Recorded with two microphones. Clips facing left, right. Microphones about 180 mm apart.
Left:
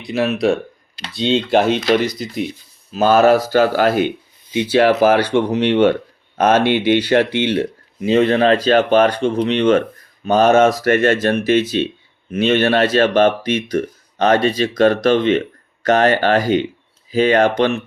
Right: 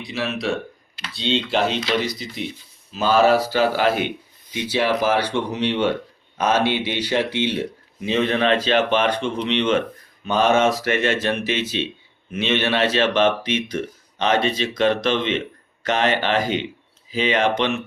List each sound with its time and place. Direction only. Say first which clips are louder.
0.1 s speech: left 8 dB; 50° left (ahead or behind)
8.1 s speech: left 6 dB; 35° left (ahead or behind)